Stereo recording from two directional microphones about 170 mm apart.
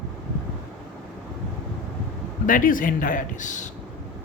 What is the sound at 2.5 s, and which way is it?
A woman's voice, 55° left (ahead or behind).